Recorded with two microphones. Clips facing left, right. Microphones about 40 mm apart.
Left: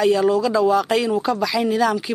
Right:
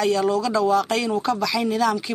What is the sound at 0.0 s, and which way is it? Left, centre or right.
A woman's voice, centre.